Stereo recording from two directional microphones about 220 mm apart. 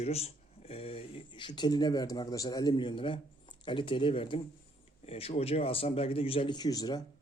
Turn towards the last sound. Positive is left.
turn(degrees=15)  # may be behind; listen again after turning